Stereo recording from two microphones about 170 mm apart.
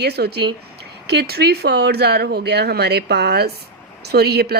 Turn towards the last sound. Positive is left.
turn(degrees=-70)  # may be behind; listen again after turning